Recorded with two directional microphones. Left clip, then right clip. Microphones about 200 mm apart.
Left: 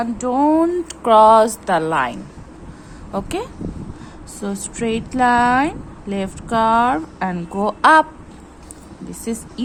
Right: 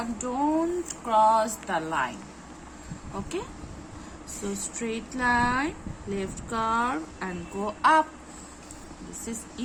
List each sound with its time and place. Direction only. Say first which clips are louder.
0.0 s speech: left 11 dB; 45° left (ahead or behind)
4.4 s speech: left 10 dB; 45° left (ahead or behind)